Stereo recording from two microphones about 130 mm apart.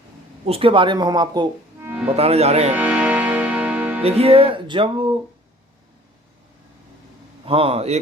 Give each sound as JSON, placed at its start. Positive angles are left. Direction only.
{"t": 0.4, "sound": "music", "side_deg": -45}
{"t": 1.8, "sound": "music", "side_deg": -10}
{"t": 2.1, "sound": "speech", "side_deg": -50}
{"t": 2.7, "sound": "music", "side_deg": -10}
{"t": 4.0, "sound": "music", "side_deg": -50}
{"t": 7.4, "sound": "speech", "side_deg": -45}